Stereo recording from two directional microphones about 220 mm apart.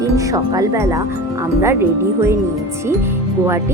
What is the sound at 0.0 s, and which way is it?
Speech, 15° right (ahead or behind).